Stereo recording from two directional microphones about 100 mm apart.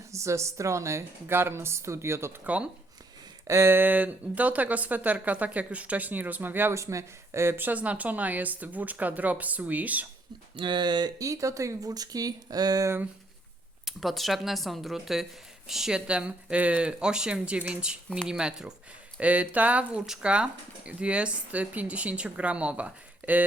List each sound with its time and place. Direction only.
0.1 s a woman's voice: 30° right (ahead or behind)
10.6 s speech: 50° right (ahead or behind)
13.8 s speech: centre (ahead or behind)